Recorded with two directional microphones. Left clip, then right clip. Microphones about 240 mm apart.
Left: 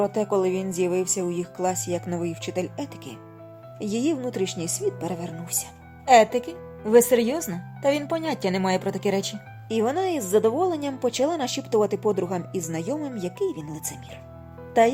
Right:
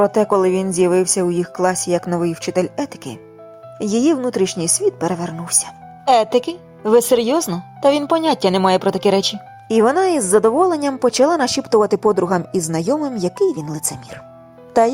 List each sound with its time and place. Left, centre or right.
0.0 s speech: right